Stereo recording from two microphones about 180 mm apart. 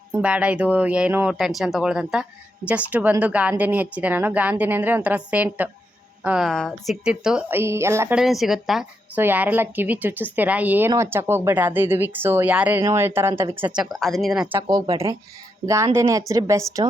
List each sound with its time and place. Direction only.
0.1 s speech: 5° right (ahead or behind)
8.2 s speech: centre (ahead or behind)
14.5 s a woman's voice: 20° right (ahead or behind)